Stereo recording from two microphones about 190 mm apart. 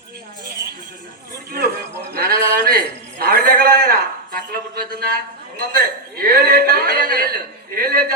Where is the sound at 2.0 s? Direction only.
55° right (ahead or behind).